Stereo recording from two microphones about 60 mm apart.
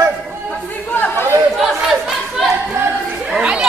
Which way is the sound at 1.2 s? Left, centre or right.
Right.